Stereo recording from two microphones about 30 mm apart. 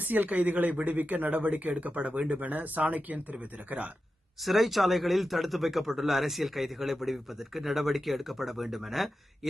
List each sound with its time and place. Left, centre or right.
0.0 s speech: right
2.3 s speech: right
4.4 s speech: centre